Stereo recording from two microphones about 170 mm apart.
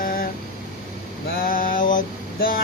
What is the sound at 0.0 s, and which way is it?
Vehicle, 55° left (ahead or behind).